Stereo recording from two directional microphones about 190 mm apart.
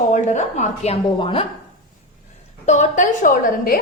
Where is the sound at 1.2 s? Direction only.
30° left (ahead or behind).